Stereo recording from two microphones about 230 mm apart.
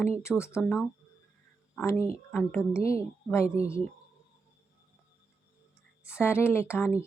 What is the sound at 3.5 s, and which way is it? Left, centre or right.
Speech, right.